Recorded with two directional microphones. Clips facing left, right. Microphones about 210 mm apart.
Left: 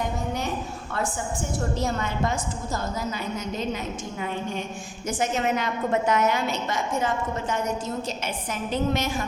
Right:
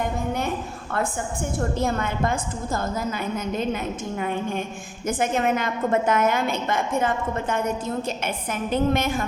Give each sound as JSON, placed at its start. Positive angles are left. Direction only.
{"t": 1.5, "sound": "a woman's voice", "side_deg": -55}
{"t": 8.7, "sound": "a woman's voice", "side_deg": -55}